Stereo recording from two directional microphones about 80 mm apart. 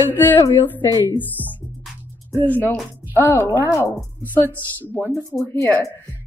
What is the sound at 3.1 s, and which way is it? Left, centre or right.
Speech, left.